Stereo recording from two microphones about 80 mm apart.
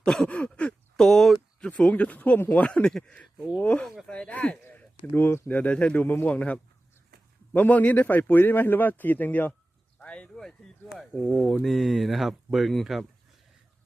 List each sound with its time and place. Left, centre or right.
0.0 s a sound: centre
1.0 s speech: centre
1.7 s speech: centre
3.3 s speech: centre
3.6 s speech: centre
4.6 s a sound: left
5.1 s speech: left
10.0 s a sound: centre
10.8 s speech: centre